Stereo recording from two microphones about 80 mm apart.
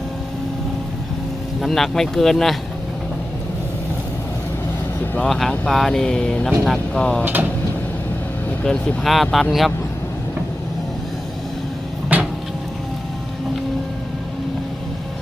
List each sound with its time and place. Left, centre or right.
1.6 s speech: centre
5.2 s speech: centre
8.6 s speech: centre
12.1 s vehicle: centre